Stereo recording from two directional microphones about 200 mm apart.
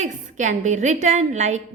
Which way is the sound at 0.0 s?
40° right (ahead or behind).